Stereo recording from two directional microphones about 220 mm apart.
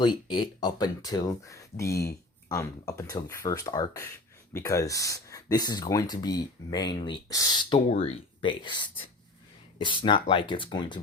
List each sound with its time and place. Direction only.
0.0 s speech: 20° left (ahead or behind)